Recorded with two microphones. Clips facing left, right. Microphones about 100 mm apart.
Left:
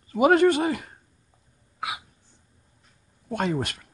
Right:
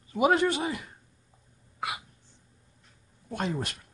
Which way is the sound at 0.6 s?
55° left (ahead or behind).